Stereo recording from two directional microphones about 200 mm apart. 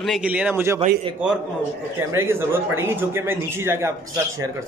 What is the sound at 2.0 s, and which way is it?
Speech, 10° right (ahead or behind).